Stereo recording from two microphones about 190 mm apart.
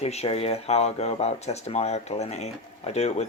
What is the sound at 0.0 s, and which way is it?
Speech, 35° left (ahead or behind).